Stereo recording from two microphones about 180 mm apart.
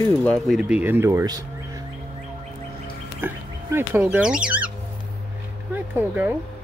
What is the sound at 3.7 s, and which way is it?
Speech, 10° right (ahead or behind).